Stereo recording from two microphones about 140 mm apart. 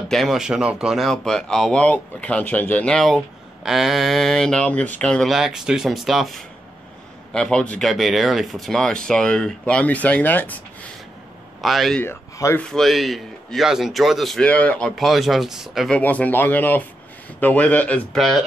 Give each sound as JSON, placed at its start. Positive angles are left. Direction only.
{"t": 0.1, "sound": "speech", "side_deg": 0}
{"t": 11.6, "sound": "speech", "side_deg": 0}
{"t": 12.0, "sound": "speech", "side_deg": 20}
{"t": 12.6, "sound": "speech", "side_deg": 0}
{"t": 15.0, "sound": "speech", "side_deg": 0}
{"t": 16.0, "sound": "a man's voice", "side_deg": 10}